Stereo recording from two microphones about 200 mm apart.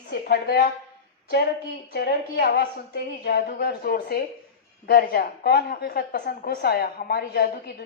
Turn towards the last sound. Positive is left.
turn(degrees=55)  # may be behind; listen again after turning